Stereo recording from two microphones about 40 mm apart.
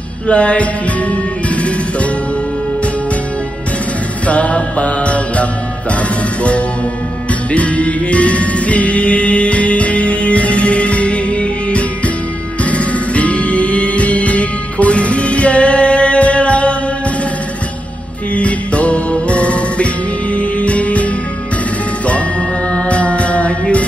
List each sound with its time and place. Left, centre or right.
0.3 s music: left
4.3 s music: left
7.5 s music: left
18.3 s music: left
22.7 s music: left